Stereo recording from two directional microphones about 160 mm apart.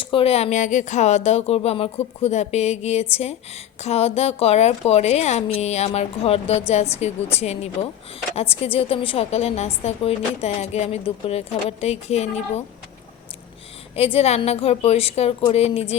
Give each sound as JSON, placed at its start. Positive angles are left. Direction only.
{"t": 0.0, "sound": "a woman's voice", "side_deg": 35}
{"t": 13.9, "sound": "a woman's voice", "side_deg": 40}